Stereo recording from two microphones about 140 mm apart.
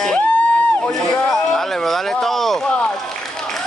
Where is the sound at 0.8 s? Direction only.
5° left (ahead or behind).